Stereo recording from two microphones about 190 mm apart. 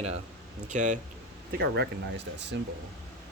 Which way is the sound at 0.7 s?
40° right (ahead or behind).